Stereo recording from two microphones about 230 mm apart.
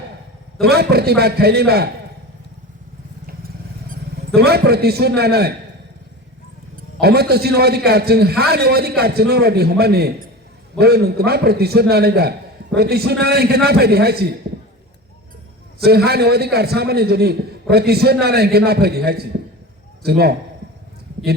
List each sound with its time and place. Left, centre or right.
0.6 s a man's voice: right
4.4 s a man's voice: right
7.0 s a man's voice: right
15.8 s a man's voice: right